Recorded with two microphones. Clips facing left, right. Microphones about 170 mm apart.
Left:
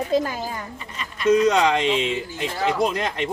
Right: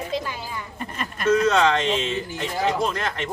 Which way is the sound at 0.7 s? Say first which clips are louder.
Right 4 dB; 50° right (ahead or behind).